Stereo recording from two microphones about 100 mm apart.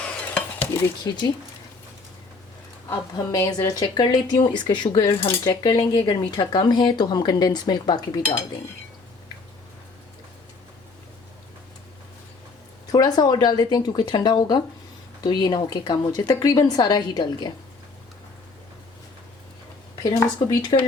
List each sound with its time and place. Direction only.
0.0 s stir: 15° left (ahead or behind)
1.1 s cutlery: 40° left (ahead or behind)
2.9 s a woman's voice: 30° left (ahead or behind); by 4.9 s 50° left (ahead or behind)
5.4 s cutlery: 40° left (ahead or behind)
6.1 s a woman's voice: 50° left (ahead or behind)
12.9 s a woman's voice: 40° left (ahead or behind)
20.0 s cutlery: 40° left (ahead or behind)